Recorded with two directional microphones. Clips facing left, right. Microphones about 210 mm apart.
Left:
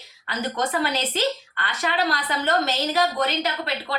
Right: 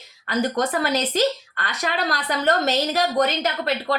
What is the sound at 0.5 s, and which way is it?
A woman's voice, 45° right (ahead or behind).